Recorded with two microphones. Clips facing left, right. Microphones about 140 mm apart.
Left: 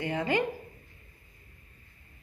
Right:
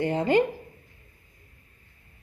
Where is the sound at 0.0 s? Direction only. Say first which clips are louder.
Right 7 dB; 30° right (ahead or behind).